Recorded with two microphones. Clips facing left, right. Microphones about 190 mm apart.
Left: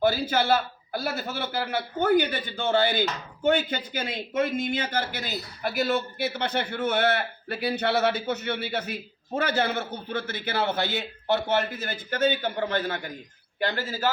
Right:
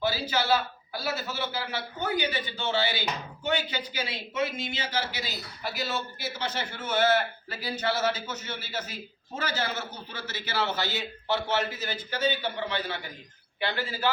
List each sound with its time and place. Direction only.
0.0 s a man's voice: 50° left (ahead or behind)